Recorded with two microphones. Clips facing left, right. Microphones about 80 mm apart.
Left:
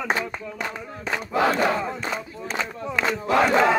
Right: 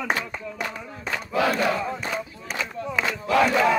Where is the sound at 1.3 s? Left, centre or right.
Left.